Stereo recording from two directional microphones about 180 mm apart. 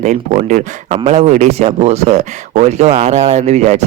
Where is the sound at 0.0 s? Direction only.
40° right (ahead or behind).